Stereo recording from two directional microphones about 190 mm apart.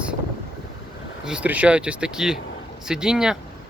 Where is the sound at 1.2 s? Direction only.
5° right (ahead or behind).